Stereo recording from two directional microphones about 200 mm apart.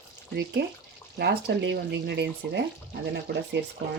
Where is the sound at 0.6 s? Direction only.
60° right (ahead or behind).